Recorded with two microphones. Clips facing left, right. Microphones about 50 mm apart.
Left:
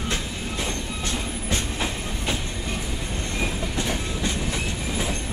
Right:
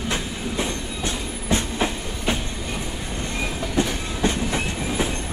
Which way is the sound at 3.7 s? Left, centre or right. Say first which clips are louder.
Right 3 dB; right.